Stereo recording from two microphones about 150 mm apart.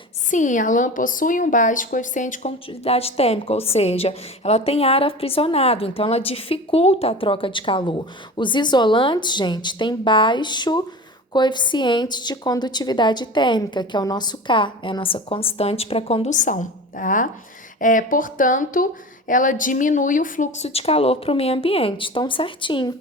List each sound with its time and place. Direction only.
0.3 s a woman's voice: 55° left (ahead or behind); by 16.3 s 40° left (ahead or behind)
16.3 s a woman's voice: 55° left (ahead or behind); by 22.9 s 35° left (ahead or behind)